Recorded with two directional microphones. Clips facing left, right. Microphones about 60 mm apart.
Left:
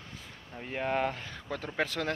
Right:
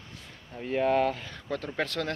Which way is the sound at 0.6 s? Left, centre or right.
Centre.